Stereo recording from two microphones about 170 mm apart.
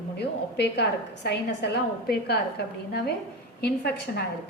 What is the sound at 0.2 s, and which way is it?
A woman's voice, 75° left (ahead or behind).